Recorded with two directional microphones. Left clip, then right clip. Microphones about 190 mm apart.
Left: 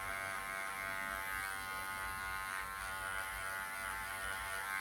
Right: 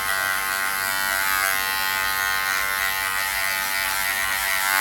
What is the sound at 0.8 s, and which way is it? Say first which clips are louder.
Electric shaver: right 18 dB; 30° right (ahead or behind).